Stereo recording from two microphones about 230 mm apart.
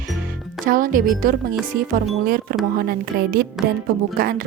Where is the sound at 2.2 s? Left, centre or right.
Right.